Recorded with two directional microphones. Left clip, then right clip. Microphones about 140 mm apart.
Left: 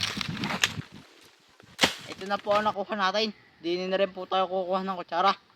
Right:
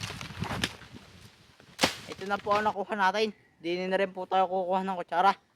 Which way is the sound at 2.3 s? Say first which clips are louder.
Left 2 dB; 35° right (ahead or behind).